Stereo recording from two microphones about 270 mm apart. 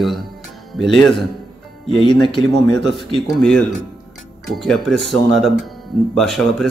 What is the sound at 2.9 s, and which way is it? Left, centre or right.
Speech, centre.